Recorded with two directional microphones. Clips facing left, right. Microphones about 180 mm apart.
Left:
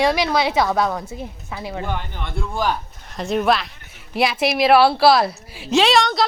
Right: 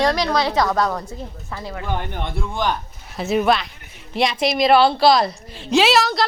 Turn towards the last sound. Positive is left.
turn(degrees=0)  # may be behind; listen again after turning